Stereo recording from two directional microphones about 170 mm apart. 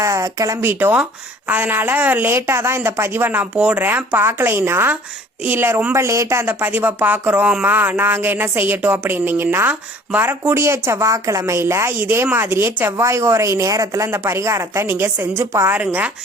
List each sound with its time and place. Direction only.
0.0 s speech: 20° right (ahead or behind)